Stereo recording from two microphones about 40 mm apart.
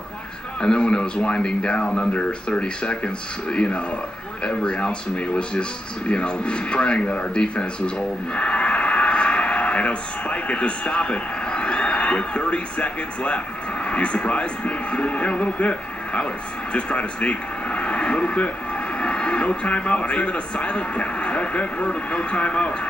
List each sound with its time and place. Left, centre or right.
0.6 s a man's voice: left